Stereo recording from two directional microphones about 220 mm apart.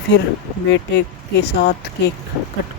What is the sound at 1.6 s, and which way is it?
Speech, 50° left (ahead or behind).